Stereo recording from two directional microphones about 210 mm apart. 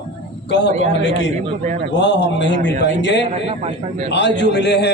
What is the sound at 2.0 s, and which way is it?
A man's voice, 55° left (ahead or behind).